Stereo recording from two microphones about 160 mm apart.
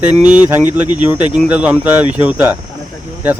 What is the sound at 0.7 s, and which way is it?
Speech, 25° left (ahead or behind).